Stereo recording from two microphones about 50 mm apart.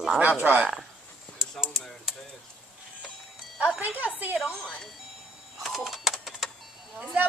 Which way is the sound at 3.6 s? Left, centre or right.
Right.